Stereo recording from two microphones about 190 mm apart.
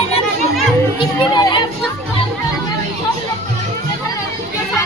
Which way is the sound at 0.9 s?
25° left (ahead or behind).